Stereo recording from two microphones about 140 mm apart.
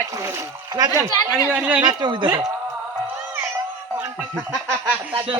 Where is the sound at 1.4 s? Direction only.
10° right (ahead or behind).